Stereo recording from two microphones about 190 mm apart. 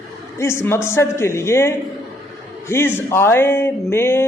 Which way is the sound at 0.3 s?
15° left (ahead or behind).